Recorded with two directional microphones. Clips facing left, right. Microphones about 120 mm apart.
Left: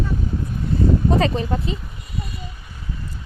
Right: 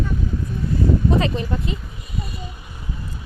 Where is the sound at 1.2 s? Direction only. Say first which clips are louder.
Left 2 dB; 35° left (ahead or behind).